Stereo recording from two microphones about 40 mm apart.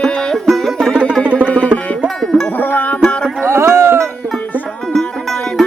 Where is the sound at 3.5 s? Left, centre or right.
Right.